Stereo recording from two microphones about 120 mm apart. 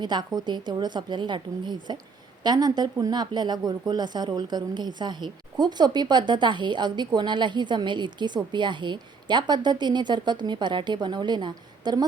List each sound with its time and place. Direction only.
0.0 s speech: 35° right (ahead or behind)